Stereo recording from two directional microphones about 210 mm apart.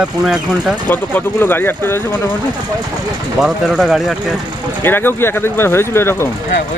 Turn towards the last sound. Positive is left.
turn(degrees=10)  # may be behind; listen again after turning